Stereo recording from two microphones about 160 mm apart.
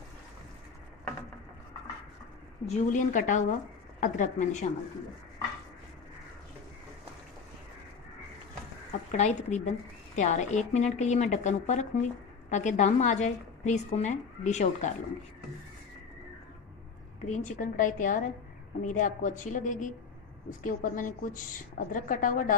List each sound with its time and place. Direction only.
2.6 s a woman's voice: 45° left (ahead or behind)
9.1 s a woman's voice: 45° left (ahead or behind)
17.3 s a woman's voice: 50° left (ahead or behind)